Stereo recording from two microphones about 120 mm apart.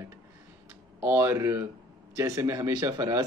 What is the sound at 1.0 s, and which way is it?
Speech, 20° right (ahead or behind).